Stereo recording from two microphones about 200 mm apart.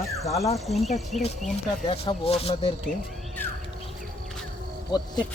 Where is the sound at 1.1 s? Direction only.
35° right (ahead or behind).